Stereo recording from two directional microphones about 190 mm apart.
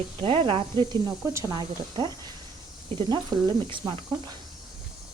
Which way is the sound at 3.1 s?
20° right (ahead or behind).